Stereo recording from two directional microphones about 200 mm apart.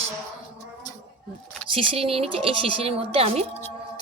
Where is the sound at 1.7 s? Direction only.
30° right (ahead or behind).